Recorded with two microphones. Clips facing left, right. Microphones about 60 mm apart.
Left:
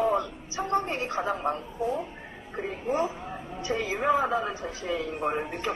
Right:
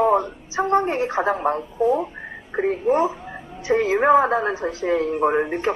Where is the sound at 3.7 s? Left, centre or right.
Right.